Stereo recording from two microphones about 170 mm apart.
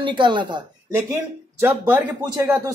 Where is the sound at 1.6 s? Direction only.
10° right (ahead or behind).